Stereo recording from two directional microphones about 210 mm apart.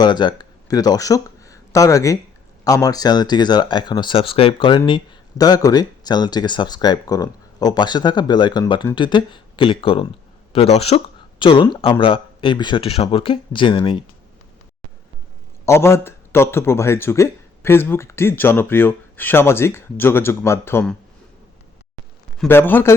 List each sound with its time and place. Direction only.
0.0 s speech: 20° left (ahead or behind)
15.6 s speech: 15° left (ahead or behind)
22.4 s speech: 10° left (ahead or behind)